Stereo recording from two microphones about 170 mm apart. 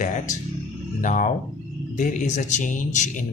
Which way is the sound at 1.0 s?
45° left (ahead or behind).